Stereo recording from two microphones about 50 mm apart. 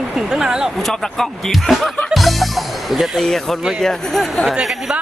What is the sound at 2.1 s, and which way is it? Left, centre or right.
Music, centre.